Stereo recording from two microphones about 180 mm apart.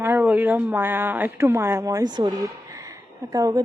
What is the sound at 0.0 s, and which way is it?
A woman's voice, 10° right (ahead or behind).